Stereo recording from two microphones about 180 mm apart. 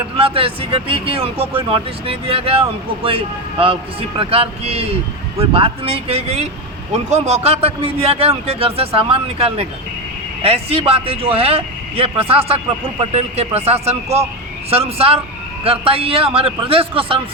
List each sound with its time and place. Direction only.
0.2 s speech: 30° right (ahead or behind)